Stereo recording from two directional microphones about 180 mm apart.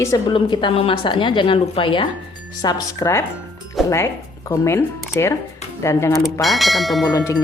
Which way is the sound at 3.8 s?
Centre (ahead or behind).